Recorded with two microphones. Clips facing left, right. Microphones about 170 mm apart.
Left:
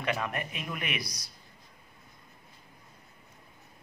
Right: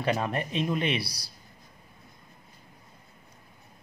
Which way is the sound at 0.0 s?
30° right (ahead or behind).